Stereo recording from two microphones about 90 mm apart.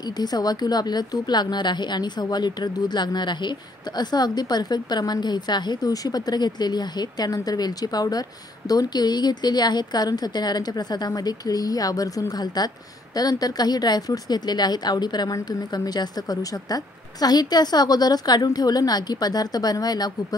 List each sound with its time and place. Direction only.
0.0 s a woman's voice: 50° left (ahead or behind)